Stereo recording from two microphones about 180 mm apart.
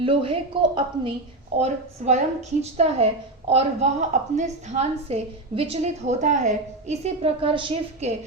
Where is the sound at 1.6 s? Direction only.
40° right (ahead or behind).